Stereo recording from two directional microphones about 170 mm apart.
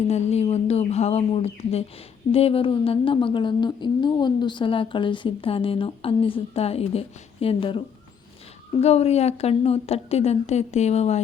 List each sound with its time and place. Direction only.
0.1 s speech: 40° left (ahead or behind)
8.8 s speech: 40° left (ahead or behind)